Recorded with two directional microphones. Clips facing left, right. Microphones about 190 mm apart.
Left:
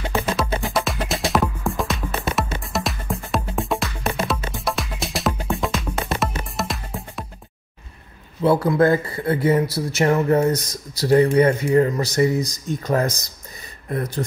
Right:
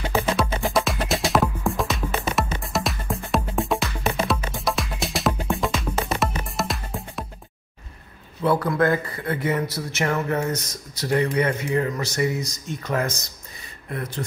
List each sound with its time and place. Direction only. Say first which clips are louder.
0.1 s music: even; centre (ahead or behind)
8.4 s speech: left 4 dB; 30° left (ahead or behind)